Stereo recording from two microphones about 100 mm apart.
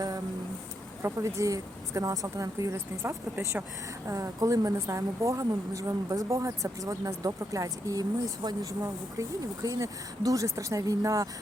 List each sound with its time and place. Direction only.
1.0 s a woman's voice: 35° right (ahead or behind)